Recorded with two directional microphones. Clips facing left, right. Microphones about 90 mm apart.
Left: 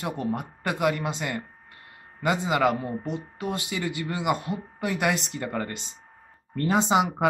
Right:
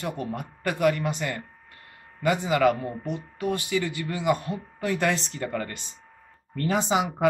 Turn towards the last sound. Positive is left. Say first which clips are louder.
# left 2 dB
turn(degrees=20)  # may be behind; listen again after turning